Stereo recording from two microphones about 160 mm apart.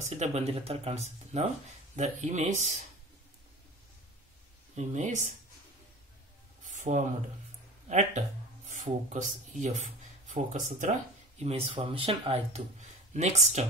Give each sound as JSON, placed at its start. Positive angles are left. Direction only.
{"t": 0.0, "sound": "speech", "side_deg": -45}
{"t": 4.7, "sound": "speech", "side_deg": -50}
{"t": 6.6, "sound": "a sound", "side_deg": -50}
{"t": 8.6, "sound": "speech", "side_deg": -50}